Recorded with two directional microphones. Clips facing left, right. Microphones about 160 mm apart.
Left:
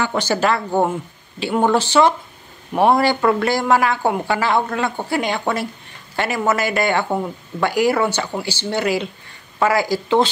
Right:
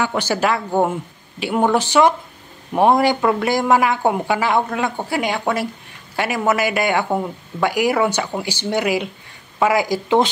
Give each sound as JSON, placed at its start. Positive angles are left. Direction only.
{"t": 0.0, "sound": "speech", "side_deg": -10}